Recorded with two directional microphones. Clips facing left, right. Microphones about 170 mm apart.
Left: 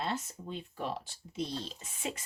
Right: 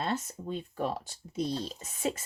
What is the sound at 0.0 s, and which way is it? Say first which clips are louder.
Speech: right 3 dB; 45° right (ahead or behind).